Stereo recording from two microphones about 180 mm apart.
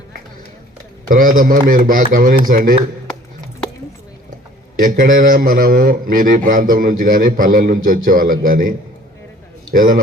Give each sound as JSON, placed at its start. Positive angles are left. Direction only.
{"t": 1.1, "sound": "a man's voice", "side_deg": -50}
{"t": 4.8, "sound": "a man's voice", "side_deg": -50}
{"t": 9.7, "sound": "a man's voice", "side_deg": -50}